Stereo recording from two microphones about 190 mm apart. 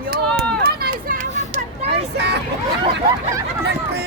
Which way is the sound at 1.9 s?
60° right (ahead or behind).